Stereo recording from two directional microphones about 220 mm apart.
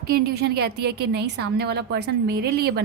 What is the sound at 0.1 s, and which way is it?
A woman's voice, 45° right (ahead or behind).